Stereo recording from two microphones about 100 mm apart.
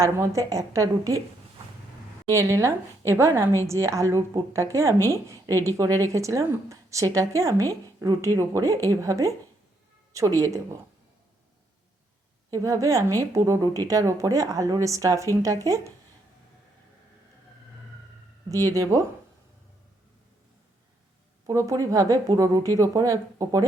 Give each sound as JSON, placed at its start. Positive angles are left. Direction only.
{"t": 0.0, "sound": "a woman's voice", "side_deg": -30}
{"t": 2.3, "sound": "a woman's voice", "side_deg": -30}
{"t": 12.5, "sound": "a woman's voice", "side_deg": -30}
{"t": 18.4, "sound": "a woman's voice", "side_deg": -35}
{"t": 21.4, "sound": "a woman's voice", "side_deg": -35}